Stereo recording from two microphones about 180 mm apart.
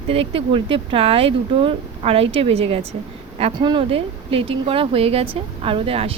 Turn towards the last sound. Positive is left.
turn(degrees=-30)  # may be behind; listen again after turning